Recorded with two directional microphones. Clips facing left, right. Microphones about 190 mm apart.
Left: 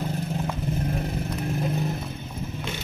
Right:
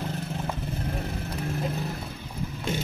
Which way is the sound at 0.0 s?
15° left (ahead or behind).